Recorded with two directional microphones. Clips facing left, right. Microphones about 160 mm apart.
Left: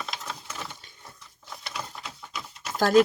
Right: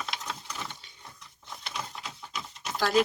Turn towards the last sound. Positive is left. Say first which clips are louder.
# left 6 dB
turn(degrees=45)  # may be behind; listen again after turning